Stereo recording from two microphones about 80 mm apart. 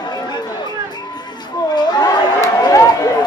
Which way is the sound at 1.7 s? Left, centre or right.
Left.